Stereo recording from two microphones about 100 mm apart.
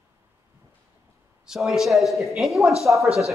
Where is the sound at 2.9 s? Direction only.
15° right (ahead or behind).